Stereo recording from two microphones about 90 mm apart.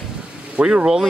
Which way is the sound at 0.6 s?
10° right (ahead or behind).